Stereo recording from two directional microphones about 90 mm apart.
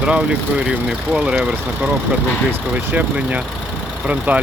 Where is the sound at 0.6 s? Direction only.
10° right (ahead or behind).